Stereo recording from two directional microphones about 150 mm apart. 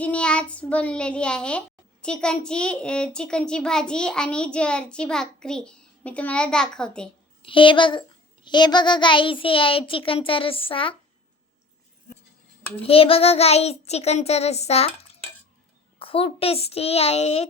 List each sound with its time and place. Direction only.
0.0 s a child's voice: 10° left (ahead or behind)
7.4 s a child's voice: 35° left (ahead or behind)
12.8 s child singing: 40° left (ahead or behind)
16.0 s a child's voice: 40° left (ahead or behind)